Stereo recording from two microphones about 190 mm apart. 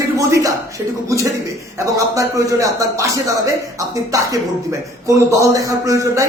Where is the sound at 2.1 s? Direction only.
15° right (ahead or behind).